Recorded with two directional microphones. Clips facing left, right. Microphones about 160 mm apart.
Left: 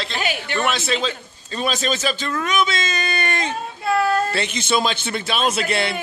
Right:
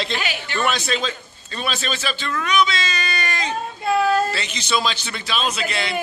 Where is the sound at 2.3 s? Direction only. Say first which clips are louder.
Right 3 dB; 40° left (ahead or behind).